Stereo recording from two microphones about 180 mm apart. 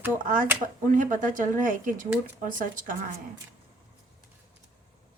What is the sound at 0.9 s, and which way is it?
Speech, 45° right (ahead or behind).